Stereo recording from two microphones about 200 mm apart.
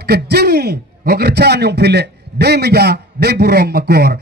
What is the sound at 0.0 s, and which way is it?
A man's voice, 55° right (ahead or behind).